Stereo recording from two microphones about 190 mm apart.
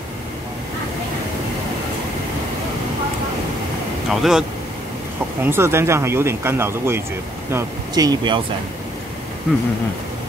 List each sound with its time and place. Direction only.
4.1 s speech: centre (ahead or behind)
5.4 s speech: 10° right (ahead or behind)